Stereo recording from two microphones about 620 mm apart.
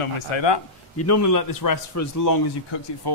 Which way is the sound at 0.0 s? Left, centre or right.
Left.